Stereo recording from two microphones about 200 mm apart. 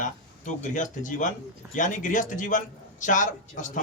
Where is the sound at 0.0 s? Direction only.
40° left (ahead or behind).